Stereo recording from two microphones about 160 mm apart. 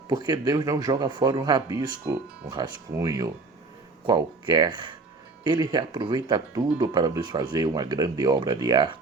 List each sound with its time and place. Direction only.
0.1 s speech: 25° right (ahead or behind)